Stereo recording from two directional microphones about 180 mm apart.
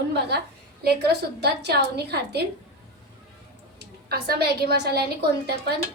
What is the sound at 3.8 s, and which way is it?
A woman's voice, 60° right (ahead or behind).